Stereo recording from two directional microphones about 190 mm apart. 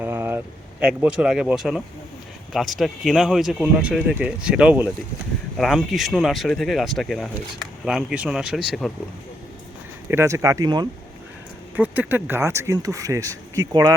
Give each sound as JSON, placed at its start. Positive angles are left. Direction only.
{"t": 0.0, "sound": "speech", "side_deg": -10}
{"t": 10.1, "sound": "speech", "side_deg": -15}
{"t": 11.8, "sound": "speech", "side_deg": -10}